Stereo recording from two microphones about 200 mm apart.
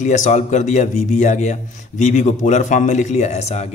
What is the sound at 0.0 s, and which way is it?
Speech, 35° left (ahead or behind).